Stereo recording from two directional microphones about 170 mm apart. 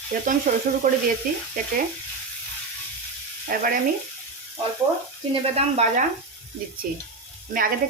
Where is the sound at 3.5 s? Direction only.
55° right (ahead or behind).